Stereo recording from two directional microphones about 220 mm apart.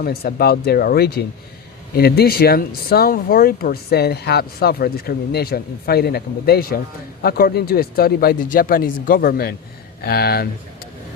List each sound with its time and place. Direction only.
0.0 s speech: 45° left (ahead or behind)